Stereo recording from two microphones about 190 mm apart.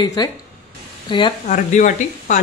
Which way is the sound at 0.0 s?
20° left (ahead or behind).